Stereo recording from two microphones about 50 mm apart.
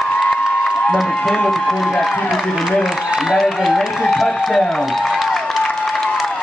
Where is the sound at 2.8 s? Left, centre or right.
Centre.